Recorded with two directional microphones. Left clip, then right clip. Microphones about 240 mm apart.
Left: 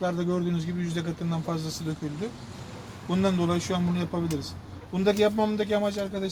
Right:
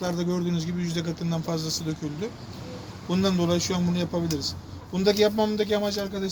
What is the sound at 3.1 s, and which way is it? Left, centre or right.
A man's voice, left.